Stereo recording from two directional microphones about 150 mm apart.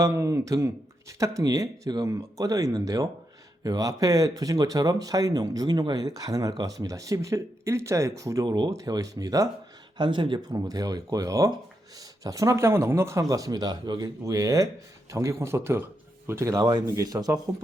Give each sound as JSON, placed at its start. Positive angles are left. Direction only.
{"t": 0.0, "sound": "speech", "side_deg": -20}